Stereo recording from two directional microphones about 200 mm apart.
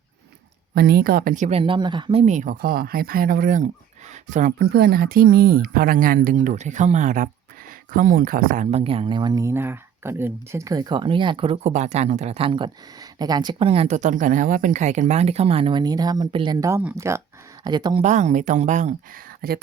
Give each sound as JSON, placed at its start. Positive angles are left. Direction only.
{"t": 0.7, "sound": "speech", "side_deg": -50}
{"t": 18.0, "sound": "speech", "side_deg": -35}
{"t": 19.4, "sound": "speech", "side_deg": -50}